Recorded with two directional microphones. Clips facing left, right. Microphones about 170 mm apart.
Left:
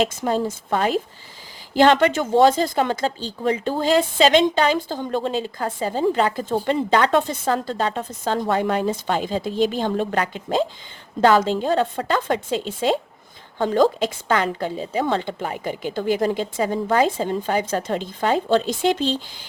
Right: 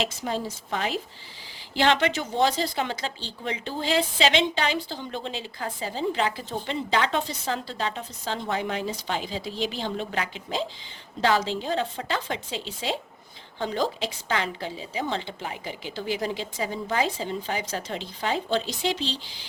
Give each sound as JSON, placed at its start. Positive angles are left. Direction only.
{"t": 0.0, "sound": "speech", "side_deg": 50}